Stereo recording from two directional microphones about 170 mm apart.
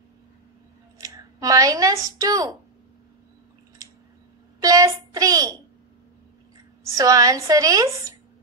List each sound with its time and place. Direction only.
0.9 s speech: 20° right (ahead or behind)
4.6 s a child's voice: 20° right (ahead or behind)
6.8 s a woman's voice: 20° right (ahead or behind)